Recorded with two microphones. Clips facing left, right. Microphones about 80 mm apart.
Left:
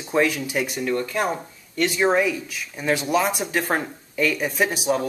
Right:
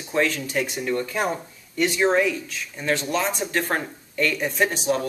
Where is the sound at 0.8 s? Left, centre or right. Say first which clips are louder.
Left 2 dB; centre.